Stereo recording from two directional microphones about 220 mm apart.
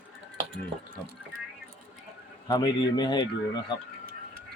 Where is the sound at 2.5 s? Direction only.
15° left (ahead or behind).